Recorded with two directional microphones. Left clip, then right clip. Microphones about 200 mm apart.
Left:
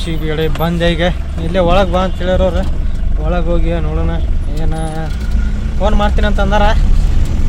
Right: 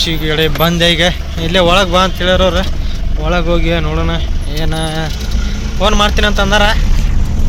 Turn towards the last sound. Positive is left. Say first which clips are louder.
# right 3 dB
turn(degrees=5)  # may be behind; listen again after turning